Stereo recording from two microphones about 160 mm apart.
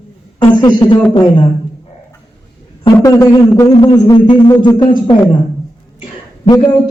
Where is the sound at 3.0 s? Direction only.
20° left (ahead or behind).